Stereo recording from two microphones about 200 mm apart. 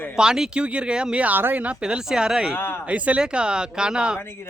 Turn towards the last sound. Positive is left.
turn(degrees=-5)  # may be behind; listen again after turning